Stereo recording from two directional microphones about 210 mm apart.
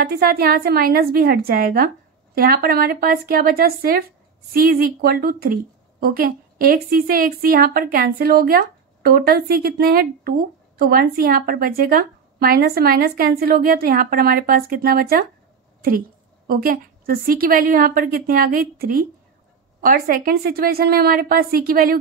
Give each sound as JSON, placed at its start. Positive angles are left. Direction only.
{"t": 0.0, "sound": "a woman's voice", "side_deg": -45}
{"t": 16.4, "sound": "a woman's voice", "side_deg": -45}